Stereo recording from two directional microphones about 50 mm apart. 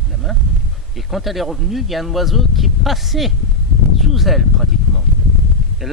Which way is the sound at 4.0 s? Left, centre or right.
Centre.